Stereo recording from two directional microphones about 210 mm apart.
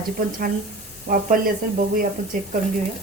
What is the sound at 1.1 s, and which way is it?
Speech, 40° right (ahead or behind).